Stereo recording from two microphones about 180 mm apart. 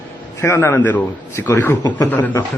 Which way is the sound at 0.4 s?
15° left (ahead or behind).